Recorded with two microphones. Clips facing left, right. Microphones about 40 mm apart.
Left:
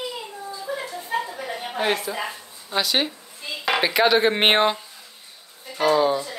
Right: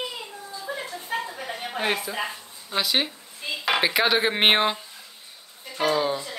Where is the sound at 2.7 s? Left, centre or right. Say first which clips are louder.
Left 2 dB; centre.